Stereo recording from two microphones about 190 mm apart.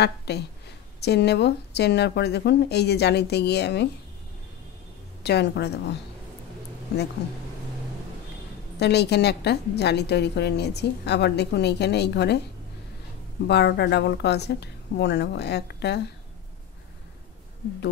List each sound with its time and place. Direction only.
0.0 s a woman's voice: 60° left (ahead or behind)
5.2 s a woman's voice: 60° left (ahead or behind)
8.7 s a woman's voice: 60° left (ahead or behind)
13.5 s a woman's voice: 60° left (ahead or behind)